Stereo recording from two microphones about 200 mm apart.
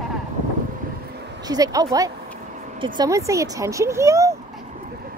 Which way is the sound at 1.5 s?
20° right (ahead or behind).